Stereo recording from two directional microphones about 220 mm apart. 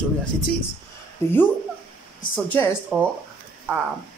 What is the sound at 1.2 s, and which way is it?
A woman's voice, 10° left (ahead or behind).